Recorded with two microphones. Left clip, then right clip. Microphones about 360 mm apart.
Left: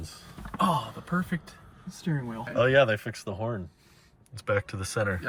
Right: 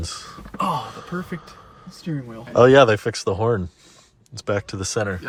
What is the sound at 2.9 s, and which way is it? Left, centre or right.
Speech, centre.